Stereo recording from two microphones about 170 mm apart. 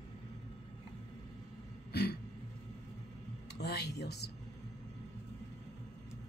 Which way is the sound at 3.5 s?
75° left (ahead or behind).